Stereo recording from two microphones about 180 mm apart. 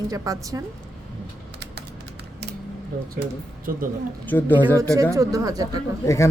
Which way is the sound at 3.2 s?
60° right (ahead or behind).